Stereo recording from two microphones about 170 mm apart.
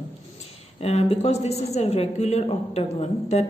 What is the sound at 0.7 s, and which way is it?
A woman's voice, 40° left (ahead or behind).